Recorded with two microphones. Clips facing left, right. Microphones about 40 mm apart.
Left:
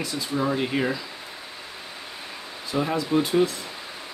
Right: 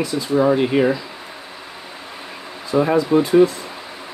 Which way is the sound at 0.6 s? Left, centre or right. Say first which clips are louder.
Right 8 dB; centre.